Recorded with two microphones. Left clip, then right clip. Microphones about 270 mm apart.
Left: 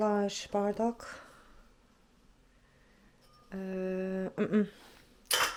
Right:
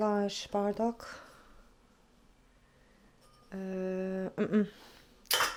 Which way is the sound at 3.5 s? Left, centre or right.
Centre.